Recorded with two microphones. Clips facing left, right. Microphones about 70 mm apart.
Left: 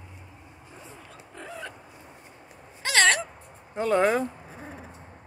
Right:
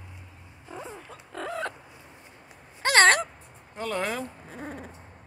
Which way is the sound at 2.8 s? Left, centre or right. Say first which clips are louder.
Right 3 dB; right.